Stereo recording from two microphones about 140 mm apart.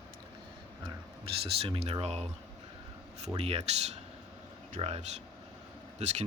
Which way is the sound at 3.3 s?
45° right (ahead or behind).